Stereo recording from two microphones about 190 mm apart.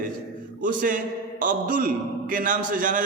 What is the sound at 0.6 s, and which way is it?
A man's voice, 45° right (ahead or behind).